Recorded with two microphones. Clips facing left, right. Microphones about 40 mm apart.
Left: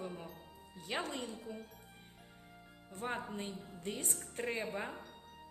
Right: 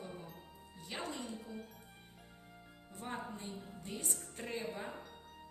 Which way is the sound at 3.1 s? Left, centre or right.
Left.